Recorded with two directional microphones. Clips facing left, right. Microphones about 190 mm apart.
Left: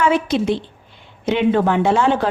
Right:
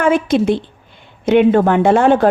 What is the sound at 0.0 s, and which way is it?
A woman's voice, 50° right (ahead or behind).